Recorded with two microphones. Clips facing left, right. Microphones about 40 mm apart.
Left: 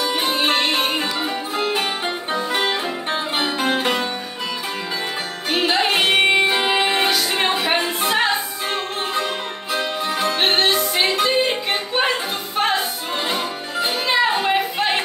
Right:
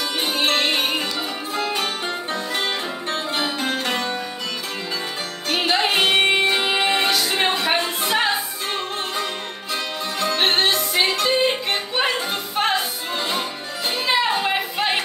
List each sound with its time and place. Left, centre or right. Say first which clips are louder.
0.0 s music: left 2 dB; centre
2.3 s music: left 5 dB; left
2.7 s music: left 3 dB; centre
5.5 s music: left 1 dB; centre
10.2 s music: even; centre
14.0 s a sound: left 1 dB; centre